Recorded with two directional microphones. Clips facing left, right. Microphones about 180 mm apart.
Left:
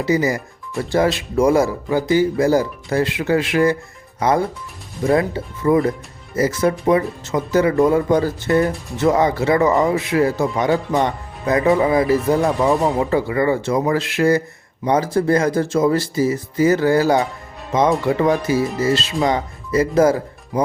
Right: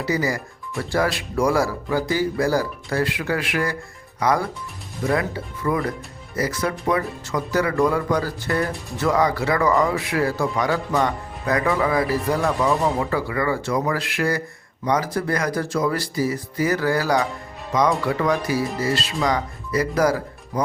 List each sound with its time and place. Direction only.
0.0 s speech: 20° left (ahead or behind)